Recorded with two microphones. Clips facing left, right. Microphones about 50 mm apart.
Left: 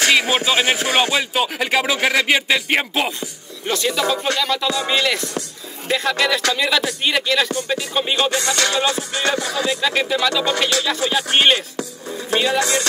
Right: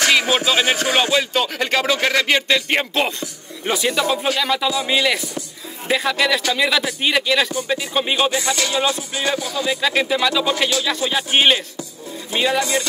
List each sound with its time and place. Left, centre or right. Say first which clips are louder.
0.0 s music: even; centre
0.5 s speech: even; centre
3.6 s music: right 1 dB; centre
5.9 s speech: right 1 dB; centre
7.6 s music: right 1 dB; centre
8.9 s music: left 2 dB; left
9.7 s speech: right 2 dB; centre